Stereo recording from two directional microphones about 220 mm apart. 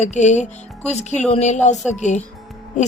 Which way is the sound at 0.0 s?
30° left (ahead or behind).